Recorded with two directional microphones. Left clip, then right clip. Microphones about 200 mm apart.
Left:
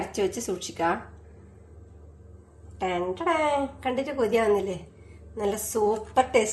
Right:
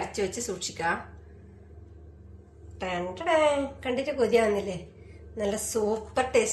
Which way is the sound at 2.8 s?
45° left (ahead or behind).